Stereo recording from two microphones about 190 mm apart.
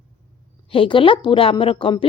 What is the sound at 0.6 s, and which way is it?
Speech, 30° left (ahead or behind).